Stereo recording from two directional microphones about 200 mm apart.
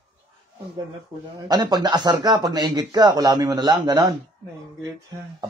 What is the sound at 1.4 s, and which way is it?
Speech, 20° right (ahead or behind).